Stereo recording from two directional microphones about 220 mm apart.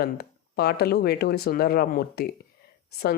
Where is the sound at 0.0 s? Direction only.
45° left (ahead or behind).